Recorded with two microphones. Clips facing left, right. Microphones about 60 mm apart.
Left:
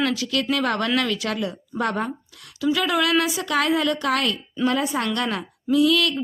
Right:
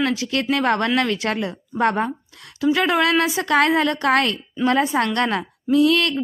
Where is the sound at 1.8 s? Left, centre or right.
Right.